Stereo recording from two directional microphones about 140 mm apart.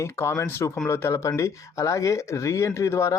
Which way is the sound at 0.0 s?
20° left (ahead or behind).